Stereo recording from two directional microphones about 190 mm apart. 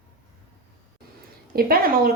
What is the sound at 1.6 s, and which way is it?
Speech, 50° right (ahead or behind).